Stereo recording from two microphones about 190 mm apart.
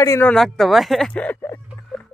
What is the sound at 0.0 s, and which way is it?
Speech, 15° left (ahead or behind).